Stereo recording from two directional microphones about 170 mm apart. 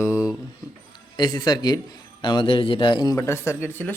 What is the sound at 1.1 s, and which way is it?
A man's voice, 25° left (ahead or behind).